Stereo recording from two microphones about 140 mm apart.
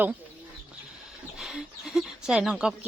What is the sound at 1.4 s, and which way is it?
Speech, centre (ahead or behind).